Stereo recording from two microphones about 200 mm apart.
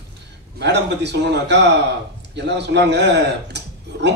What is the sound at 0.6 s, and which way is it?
A man's voice, 60° right (ahead or behind).